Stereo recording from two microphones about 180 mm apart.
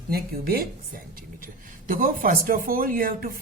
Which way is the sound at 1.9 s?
50° right (ahead or behind).